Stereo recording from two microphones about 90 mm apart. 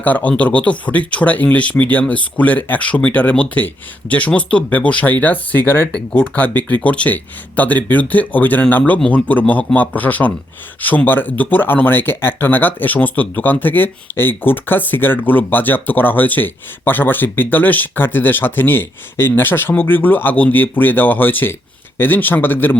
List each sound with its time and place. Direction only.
0.0 s speech: 20° left (ahead or behind)